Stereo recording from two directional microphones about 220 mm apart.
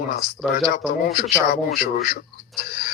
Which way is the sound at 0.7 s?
45° left (ahead or behind).